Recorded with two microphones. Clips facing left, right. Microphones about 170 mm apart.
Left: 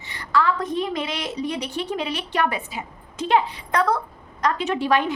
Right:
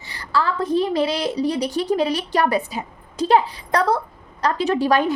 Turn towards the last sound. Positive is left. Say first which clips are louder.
# right 3 dB
turn(degrees=-40)  # may be behind; listen again after turning